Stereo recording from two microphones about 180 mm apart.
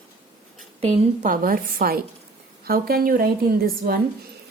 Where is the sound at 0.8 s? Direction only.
40° right (ahead or behind); by 4.0 s 55° right (ahead or behind).